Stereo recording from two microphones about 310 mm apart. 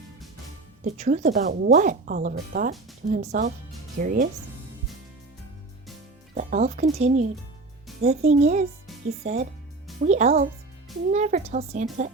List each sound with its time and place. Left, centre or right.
0.9 s speech: right
6.3 s speech: right